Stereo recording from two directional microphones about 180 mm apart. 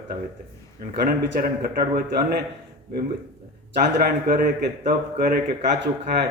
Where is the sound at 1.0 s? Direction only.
55° right (ahead or behind).